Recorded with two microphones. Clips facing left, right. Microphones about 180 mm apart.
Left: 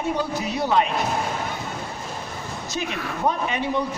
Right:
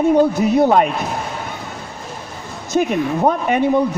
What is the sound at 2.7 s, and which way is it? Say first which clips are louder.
Speech: right 13 dB; 50° right (ahead or behind).